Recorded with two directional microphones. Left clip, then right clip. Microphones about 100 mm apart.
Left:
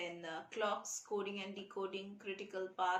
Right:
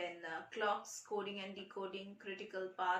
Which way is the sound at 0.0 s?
40° left (ahead or behind).